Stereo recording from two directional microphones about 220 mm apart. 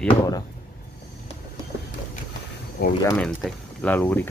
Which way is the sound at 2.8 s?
45° left (ahead or behind).